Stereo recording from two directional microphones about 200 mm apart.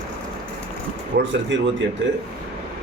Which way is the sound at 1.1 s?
50° right (ahead or behind).